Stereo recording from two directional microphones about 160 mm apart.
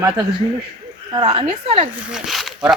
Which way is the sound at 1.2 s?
40° right (ahead or behind).